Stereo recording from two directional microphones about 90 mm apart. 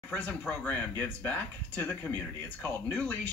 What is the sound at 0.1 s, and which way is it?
Speech, 20° left (ahead or behind).